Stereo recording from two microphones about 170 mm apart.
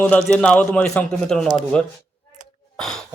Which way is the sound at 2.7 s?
5° left (ahead or behind).